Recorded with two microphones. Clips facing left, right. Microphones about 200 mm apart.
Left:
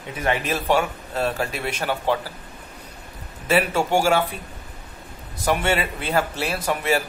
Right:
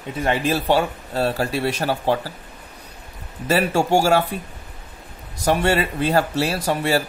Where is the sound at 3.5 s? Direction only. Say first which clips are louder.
Right 2 dB; 40° right (ahead or behind).